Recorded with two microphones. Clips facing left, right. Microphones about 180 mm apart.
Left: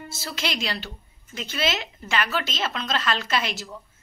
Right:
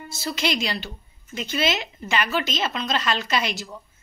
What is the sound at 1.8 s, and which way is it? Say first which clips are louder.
A woman's voice: right 1 dB; 15° right (ahead or behind).